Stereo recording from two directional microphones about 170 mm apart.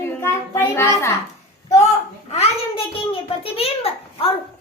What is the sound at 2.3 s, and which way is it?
A child's voice, 35° left (ahead or behind).